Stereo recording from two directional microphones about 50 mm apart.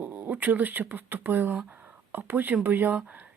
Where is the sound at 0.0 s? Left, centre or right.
Right.